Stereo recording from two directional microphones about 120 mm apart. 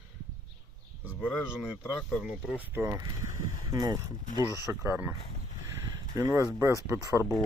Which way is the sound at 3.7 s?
35° right (ahead or behind).